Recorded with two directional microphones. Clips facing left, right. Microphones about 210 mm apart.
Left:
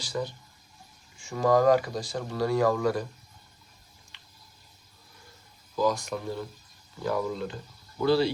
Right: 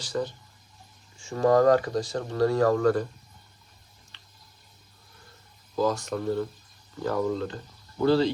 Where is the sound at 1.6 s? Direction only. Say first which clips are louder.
Right 2 dB; 10° left (ahead or behind).